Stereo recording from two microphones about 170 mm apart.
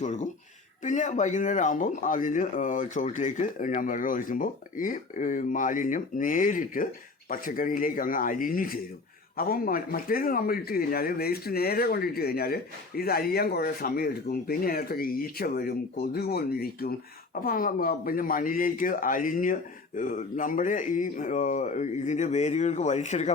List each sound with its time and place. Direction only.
0.0 s speech: 45° left (ahead or behind)